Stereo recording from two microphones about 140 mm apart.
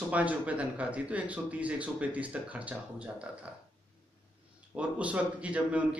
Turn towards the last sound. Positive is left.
turn(degrees=-10)  # may be behind; listen again after turning